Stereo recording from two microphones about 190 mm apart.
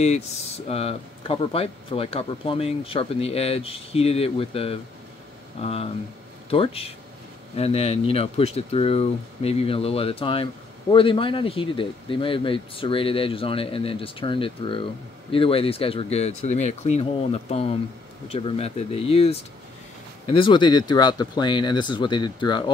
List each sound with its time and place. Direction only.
0.0 s speech: 35° left (ahead or behind)